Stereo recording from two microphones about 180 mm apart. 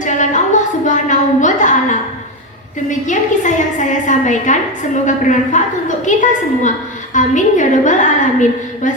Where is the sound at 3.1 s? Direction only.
45° left (ahead or behind).